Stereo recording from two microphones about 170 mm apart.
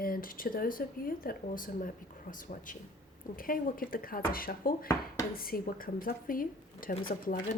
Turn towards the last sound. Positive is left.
turn(degrees=55)  # may be behind; listen again after turning